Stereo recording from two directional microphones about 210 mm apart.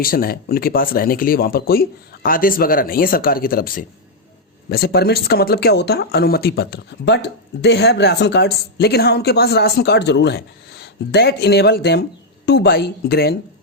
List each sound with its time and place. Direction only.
0.0 s speech: 45° left (ahead or behind)